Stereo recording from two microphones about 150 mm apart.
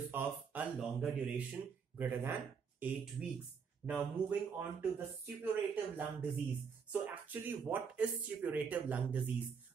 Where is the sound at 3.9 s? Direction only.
10° right (ahead or behind).